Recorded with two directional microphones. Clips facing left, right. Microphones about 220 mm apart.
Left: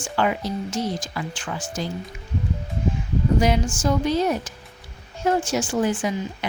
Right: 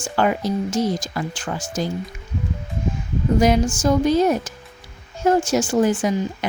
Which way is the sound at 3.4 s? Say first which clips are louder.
Right 8 dB; 45° right (ahead or behind).